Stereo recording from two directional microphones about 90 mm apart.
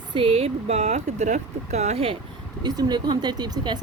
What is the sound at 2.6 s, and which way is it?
Speech, 50° right (ahead or behind).